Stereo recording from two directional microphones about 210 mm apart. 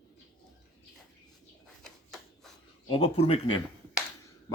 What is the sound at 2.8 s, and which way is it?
Speech, 25° left (ahead or behind).